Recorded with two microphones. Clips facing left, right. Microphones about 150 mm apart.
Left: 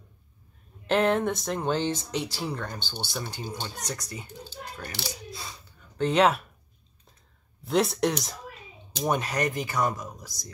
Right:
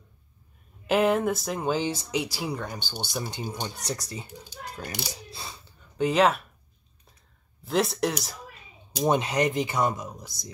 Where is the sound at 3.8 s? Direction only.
30° right (ahead or behind).